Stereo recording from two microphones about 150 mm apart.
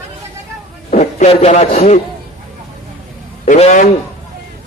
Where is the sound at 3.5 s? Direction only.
50° left (ahead or behind).